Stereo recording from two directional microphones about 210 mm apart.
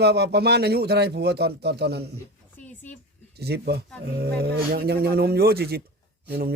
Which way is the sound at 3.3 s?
50° right (ahead or behind).